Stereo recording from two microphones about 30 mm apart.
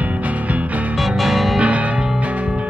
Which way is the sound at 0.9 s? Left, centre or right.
Centre.